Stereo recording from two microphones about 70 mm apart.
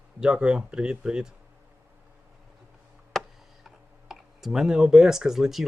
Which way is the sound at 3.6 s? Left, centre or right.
Centre.